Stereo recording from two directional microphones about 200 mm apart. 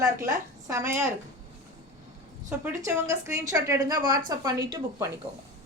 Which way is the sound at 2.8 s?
15° right (ahead or behind).